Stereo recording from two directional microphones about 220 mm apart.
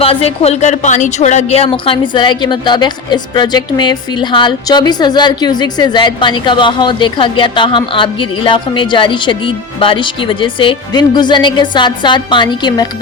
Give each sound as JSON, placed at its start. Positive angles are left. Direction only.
{"t": 0.0, "sound": "a woman's voice", "side_deg": 25}